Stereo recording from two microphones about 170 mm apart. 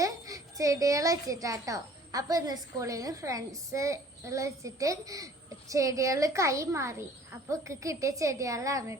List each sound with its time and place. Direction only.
0.0 s a child's voice: 20° right (ahead or behind)